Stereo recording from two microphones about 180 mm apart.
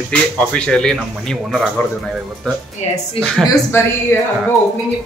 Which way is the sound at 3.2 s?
15° left (ahead or behind).